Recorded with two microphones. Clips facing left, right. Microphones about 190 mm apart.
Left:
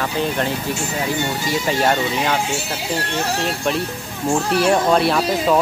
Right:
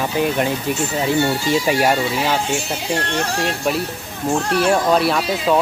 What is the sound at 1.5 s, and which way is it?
Speech, 10° right (ahead or behind).